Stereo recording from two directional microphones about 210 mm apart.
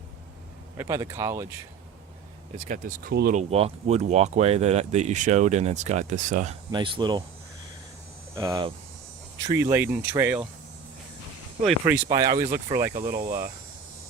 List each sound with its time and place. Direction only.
0.8 s speech: 15° right (ahead or behind)
2.6 s speech: 40° right (ahead or behind)
3.5 s speech: 30° right (ahead or behind)
6.7 s speech: 20° right (ahead or behind)
8.4 s speech: 15° right (ahead or behind)
11.9 s speech: 15° right (ahead or behind)